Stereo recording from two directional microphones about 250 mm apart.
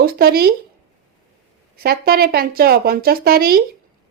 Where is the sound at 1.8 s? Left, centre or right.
Right.